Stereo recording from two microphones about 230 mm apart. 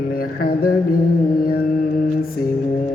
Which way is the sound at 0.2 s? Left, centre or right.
Left.